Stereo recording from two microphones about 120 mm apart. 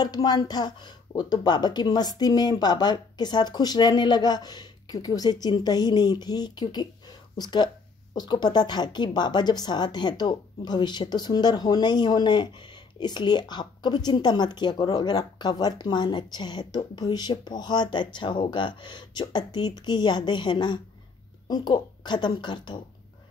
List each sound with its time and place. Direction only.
0.0 s a woman's voice: 35° left (ahead or behind)